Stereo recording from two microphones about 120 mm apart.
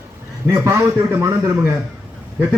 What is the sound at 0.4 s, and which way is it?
A man's voice, 25° right (ahead or behind).